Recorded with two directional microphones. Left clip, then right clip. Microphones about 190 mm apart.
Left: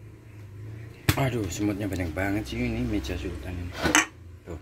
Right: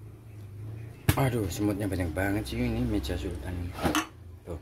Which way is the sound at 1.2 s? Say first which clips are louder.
Right 2 dB; 5° right (ahead or behind).